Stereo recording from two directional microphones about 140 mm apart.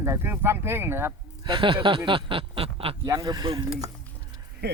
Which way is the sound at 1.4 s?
35° right (ahead or behind).